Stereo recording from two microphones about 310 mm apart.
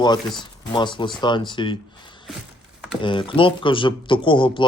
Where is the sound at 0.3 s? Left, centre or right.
Centre.